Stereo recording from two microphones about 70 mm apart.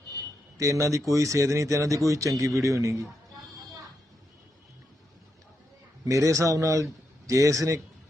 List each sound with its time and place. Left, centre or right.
0.6 s speech: right
6.1 s speech: right